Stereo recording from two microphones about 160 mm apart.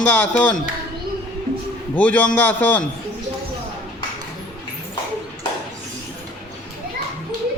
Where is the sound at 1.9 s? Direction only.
10° left (ahead or behind).